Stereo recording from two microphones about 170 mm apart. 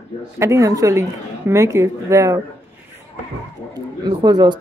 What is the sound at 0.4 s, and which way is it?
A woman's voice, 15° right (ahead or behind).